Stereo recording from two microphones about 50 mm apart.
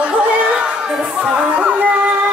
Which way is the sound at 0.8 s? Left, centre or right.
Centre.